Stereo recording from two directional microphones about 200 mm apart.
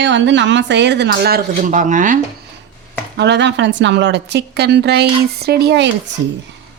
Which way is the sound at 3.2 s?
60° right (ahead or behind).